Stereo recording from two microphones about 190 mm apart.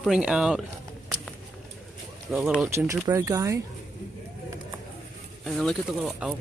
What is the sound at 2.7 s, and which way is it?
Speech, 15° right (ahead or behind).